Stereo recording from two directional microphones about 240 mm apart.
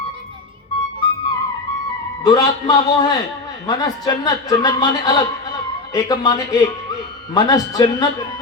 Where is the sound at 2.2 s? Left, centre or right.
Centre.